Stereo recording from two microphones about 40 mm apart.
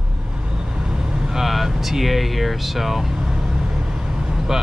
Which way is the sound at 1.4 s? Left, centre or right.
Centre.